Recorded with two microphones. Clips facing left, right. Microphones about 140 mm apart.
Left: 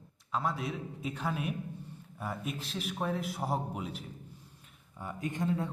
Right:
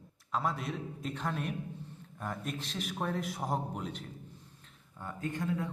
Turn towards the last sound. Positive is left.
turn(degrees=30)  # may be behind; listen again after turning